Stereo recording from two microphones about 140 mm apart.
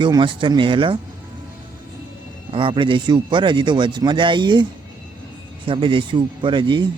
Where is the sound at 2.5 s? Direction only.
40° right (ahead or behind).